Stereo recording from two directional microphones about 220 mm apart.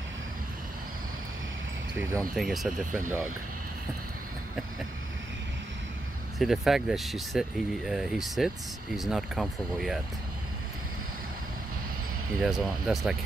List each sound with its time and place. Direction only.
2.3 s speech: centre (ahead or behind)
2.8 s speech: 35° right (ahead or behind)
6.3 s speech: centre (ahead or behind)
12.4 s speech: centre (ahead or behind)